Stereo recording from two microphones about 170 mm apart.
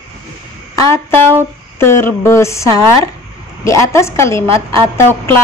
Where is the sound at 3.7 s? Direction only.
15° left (ahead or behind).